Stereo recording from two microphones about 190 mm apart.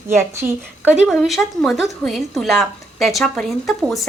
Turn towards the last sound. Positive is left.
turn(degrees=0)  # may be behind; listen again after turning